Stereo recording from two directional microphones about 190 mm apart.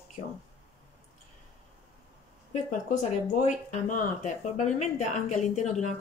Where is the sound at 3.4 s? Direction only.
45° left (ahead or behind).